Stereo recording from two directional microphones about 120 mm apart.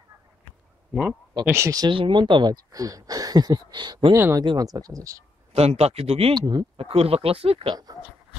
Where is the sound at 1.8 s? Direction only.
45° right (ahead or behind).